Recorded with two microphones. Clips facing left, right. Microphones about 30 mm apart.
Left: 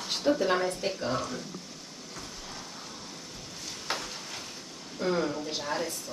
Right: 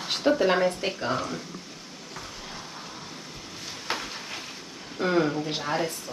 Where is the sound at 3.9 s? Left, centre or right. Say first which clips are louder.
Right 3 dB; right.